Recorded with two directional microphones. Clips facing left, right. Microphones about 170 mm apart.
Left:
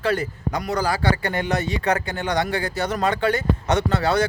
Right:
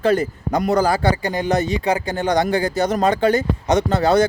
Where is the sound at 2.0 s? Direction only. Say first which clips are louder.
Right 5 dB; 40° right (ahead or behind).